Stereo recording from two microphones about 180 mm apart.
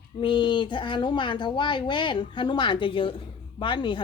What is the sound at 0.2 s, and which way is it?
Speech, 25° left (ahead or behind).